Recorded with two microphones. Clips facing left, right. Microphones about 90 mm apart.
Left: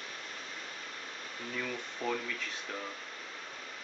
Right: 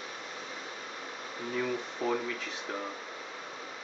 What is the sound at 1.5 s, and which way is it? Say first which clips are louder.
Speech: right 6 dB; 15° right (ahead or behind).